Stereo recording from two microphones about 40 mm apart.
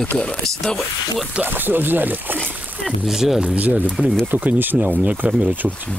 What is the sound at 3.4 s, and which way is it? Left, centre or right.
Speech, right.